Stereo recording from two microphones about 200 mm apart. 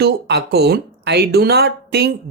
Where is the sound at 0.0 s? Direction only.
55° right (ahead or behind).